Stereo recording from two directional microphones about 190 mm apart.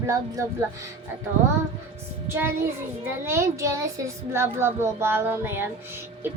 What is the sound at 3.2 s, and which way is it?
A woman's voice, 15° right (ahead or behind).